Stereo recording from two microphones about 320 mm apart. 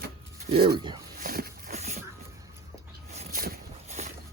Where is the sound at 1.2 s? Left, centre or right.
Right.